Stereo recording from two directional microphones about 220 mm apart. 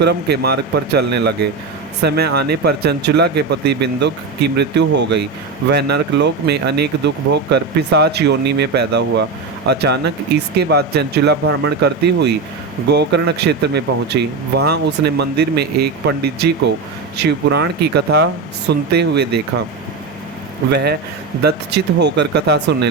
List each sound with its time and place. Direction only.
0.0 s speech: 50° right (ahead or behind)
20.7 s speech: 50° right (ahead or behind)